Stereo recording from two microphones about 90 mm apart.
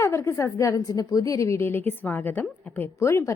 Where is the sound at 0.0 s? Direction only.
35° left (ahead or behind).